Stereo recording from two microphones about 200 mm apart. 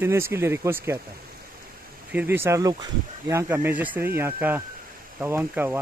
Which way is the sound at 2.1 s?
10° right (ahead or behind).